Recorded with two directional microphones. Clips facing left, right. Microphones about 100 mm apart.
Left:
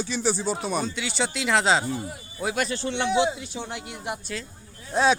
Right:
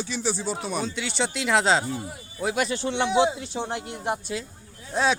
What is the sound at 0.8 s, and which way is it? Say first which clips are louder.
Speech: even; centre (ahead or behind).